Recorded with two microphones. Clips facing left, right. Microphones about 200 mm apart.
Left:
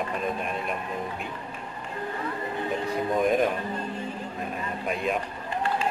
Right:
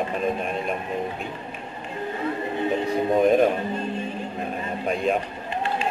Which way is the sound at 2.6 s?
20° right (ahead or behind).